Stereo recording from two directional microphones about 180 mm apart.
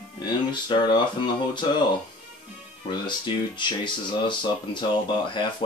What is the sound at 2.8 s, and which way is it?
Speech, 25° left (ahead or behind).